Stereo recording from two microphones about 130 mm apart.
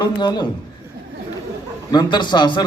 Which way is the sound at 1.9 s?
35° left (ahead or behind).